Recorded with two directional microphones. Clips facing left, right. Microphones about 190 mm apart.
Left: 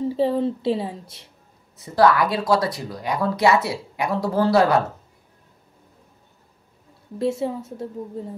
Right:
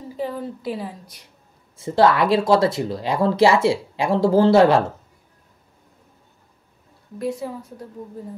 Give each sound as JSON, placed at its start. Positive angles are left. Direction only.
{"t": 0.0, "sound": "a woman's voice", "side_deg": 30}
{"t": 1.8, "sound": "speech", "side_deg": -25}
{"t": 7.2, "sound": "a woman's voice", "side_deg": 25}